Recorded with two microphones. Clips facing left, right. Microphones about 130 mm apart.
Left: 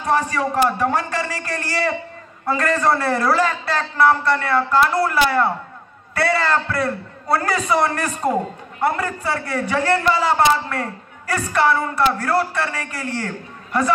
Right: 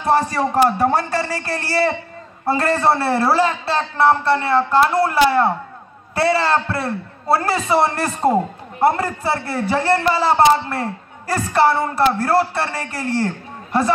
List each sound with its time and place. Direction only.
0.0 s a man's voice: 35° right (ahead or behind)